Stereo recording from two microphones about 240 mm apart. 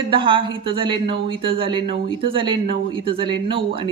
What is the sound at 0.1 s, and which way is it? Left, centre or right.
Speech, right.